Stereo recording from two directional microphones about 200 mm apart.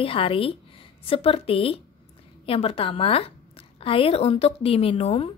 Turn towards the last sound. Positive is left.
turn(degrees=30)  # may be behind; listen again after turning